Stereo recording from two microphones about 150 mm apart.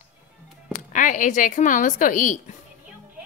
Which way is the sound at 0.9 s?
60° left (ahead or behind).